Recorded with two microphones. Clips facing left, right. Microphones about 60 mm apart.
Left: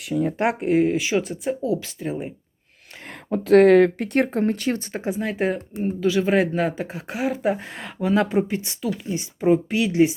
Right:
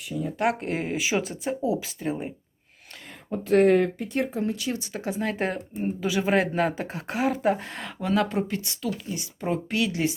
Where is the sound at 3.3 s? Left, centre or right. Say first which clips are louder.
Left 6 dB; left.